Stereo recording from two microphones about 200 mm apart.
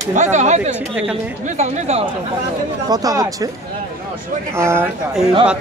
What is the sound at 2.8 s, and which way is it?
Speech, 20° right (ahead or behind).